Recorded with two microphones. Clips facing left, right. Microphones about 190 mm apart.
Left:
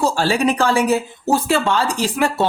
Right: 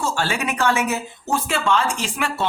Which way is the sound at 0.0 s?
35° left (ahead or behind).